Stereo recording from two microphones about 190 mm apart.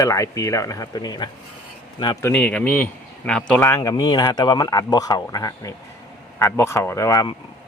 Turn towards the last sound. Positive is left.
turn(degrees=20)  # may be behind; listen again after turning